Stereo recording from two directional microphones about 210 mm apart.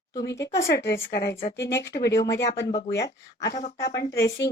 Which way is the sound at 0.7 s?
55° left (ahead or behind).